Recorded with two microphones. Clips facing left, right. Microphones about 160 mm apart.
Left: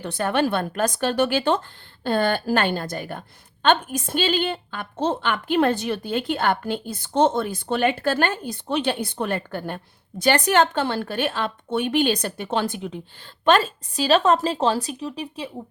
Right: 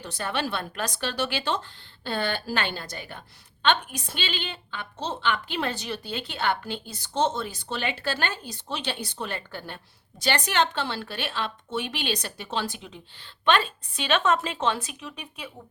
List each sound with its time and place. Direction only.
0.0 s a woman's voice: 55° left (ahead or behind)
13.4 s a woman's voice: 40° left (ahead or behind)